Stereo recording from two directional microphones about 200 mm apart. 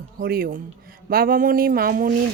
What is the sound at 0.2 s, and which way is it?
Speech, 50° right (ahead or behind).